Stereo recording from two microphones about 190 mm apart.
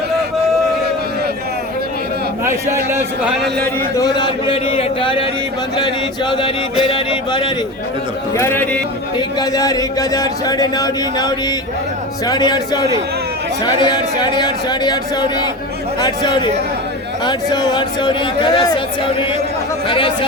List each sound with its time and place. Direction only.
3.6 s speech: 20° left (ahead or behind)
8.4 s a man's voice: 10° left (ahead or behind)
9.1 s speech: 20° left (ahead or behind)
19.9 s speech: 25° left (ahead or behind)